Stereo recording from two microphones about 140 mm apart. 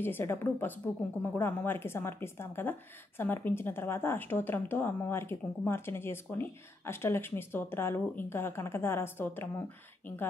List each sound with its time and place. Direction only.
0.0 s speech: 15° left (ahead or behind)